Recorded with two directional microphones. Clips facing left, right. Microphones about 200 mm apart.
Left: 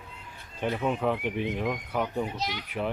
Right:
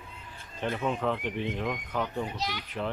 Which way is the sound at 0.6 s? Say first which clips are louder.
Left 2 dB; 10° left (ahead or behind).